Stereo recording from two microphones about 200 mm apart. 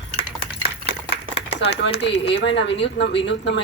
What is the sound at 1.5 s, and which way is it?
Speech, 60° left (ahead or behind).